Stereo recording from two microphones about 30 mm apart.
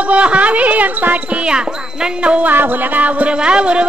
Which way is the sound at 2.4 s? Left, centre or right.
Right.